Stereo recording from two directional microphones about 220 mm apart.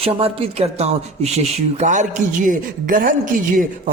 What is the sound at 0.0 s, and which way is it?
A man's voice, 25° right (ahead or behind).